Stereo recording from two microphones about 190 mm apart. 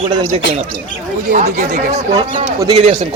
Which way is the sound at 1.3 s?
40° right (ahead or behind).